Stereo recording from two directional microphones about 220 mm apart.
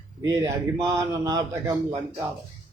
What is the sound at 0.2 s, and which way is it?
A man's voice, 15° right (ahead or behind).